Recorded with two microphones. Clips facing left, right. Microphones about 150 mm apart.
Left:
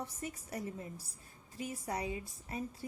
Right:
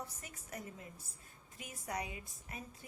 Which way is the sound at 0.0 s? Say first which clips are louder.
Left 7 dB; 30° left (ahead or behind).